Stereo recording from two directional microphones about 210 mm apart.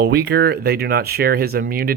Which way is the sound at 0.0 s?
50° right (ahead or behind).